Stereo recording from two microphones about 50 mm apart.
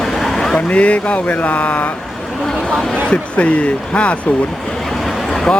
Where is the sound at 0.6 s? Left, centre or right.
Left.